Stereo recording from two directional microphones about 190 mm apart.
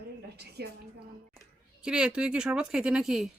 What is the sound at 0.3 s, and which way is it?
Speech, 60° right (ahead or behind).